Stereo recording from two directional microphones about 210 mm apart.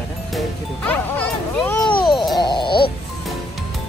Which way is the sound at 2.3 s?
20° left (ahead or behind).